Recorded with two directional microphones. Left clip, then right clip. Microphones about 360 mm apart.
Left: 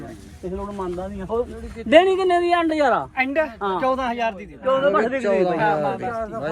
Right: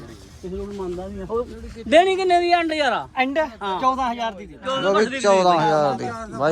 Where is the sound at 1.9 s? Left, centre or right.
Left.